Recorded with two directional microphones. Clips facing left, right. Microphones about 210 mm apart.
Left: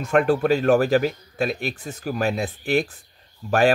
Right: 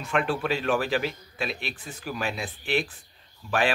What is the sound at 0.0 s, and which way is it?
Speech, 45° left (ahead or behind).